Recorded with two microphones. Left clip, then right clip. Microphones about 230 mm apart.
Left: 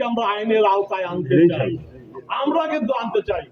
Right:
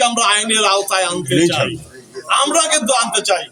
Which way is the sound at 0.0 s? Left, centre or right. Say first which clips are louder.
Right 7 dB; right.